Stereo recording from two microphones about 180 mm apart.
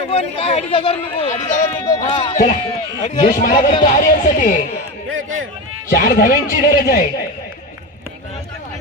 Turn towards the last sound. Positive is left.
turn(degrees=55)  # may be behind; listen again after turning